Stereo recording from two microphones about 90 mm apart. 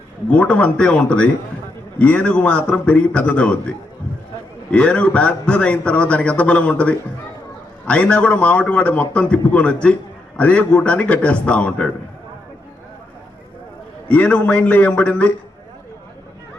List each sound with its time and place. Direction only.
0.3 s a man's voice: 10° left (ahead or behind)
14.1 s a man's voice: 15° left (ahead or behind)